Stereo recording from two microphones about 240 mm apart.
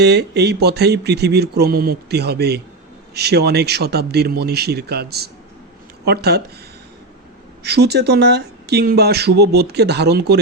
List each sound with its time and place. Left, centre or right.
0.0 s speech: right
7.6 s speech: right